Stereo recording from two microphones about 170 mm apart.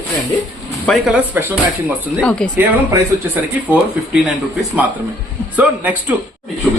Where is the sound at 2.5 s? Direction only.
10° right (ahead or behind).